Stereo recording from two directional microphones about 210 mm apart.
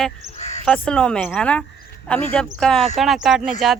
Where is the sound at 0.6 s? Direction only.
5° left (ahead or behind).